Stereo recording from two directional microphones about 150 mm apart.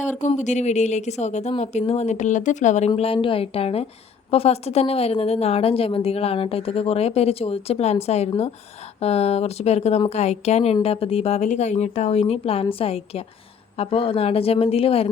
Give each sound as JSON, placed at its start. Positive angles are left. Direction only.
{"t": 0.0, "sound": "a woman's voice", "side_deg": 55}